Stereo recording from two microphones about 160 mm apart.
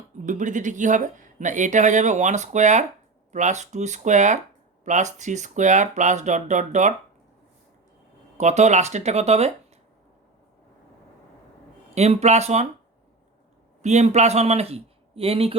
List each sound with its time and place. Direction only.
0.3 s speech: 50° right (ahead or behind)
8.4 s speech: 45° right (ahead or behind)
11.9 s speech: 45° right (ahead or behind)
13.8 s speech: 45° right (ahead or behind)